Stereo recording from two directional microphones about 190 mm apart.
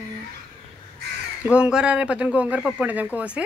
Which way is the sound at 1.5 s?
5° right (ahead or behind).